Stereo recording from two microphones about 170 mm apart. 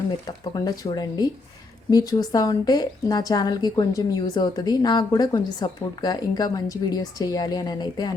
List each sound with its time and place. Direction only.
0.3 s speech: 25° left (ahead or behind)